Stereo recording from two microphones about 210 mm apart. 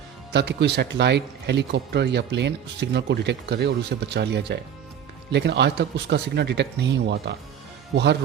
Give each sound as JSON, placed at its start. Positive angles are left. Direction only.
{"t": 0.3, "sound": "speech", "side_deg": -55}